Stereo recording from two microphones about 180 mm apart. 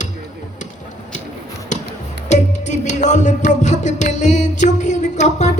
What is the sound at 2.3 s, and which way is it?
Music, 40° left (ahead or behind).